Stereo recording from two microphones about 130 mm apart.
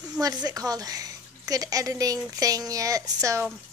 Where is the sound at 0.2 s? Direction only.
30° right (ahead or behind).